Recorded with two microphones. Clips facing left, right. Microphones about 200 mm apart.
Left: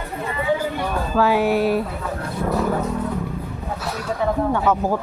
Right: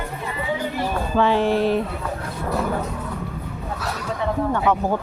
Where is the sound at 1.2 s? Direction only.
5° left (ahead or behind).